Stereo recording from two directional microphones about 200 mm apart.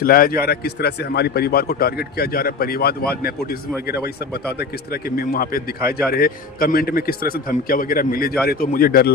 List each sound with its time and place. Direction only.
0.0 s a man's voice: 45° left (ahead or behind)